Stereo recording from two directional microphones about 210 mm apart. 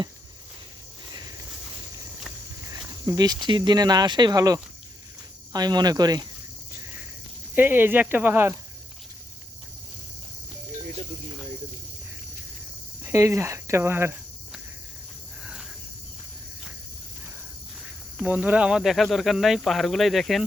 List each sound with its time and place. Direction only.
2.6 s speech: 15° right (ahead or behind)
7.5 s speech: 10° right (ahead or behind)
13.0 s cricket: 15° right (ahead or behind)
18.2 s speech: 5° right (ahead or behind)